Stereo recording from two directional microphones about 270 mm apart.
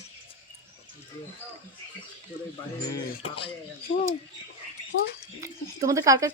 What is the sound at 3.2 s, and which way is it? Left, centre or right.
Speech, centre.